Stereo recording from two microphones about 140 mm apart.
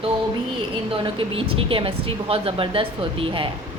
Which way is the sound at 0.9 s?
40° right (ahead or behind).